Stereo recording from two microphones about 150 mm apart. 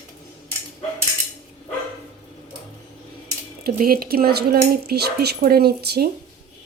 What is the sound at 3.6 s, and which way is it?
Speech, 85° right.